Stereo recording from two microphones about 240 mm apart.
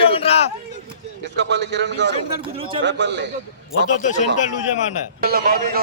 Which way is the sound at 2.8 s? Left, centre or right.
Right.